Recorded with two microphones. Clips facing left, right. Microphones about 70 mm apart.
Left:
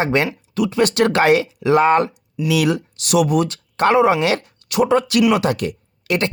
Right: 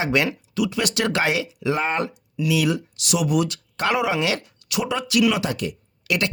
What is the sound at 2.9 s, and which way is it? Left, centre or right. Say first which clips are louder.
Speech: left 5 dB; left.